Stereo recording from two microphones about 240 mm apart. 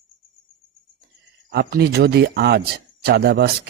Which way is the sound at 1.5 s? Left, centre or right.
Right.